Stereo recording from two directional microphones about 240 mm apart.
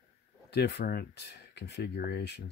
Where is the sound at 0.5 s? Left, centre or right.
Left.